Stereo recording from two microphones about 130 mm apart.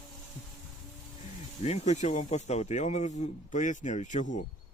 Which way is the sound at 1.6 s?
60° left (ahead or behind).